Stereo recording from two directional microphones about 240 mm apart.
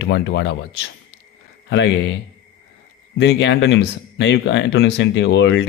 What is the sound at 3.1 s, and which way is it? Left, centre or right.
Speech, left.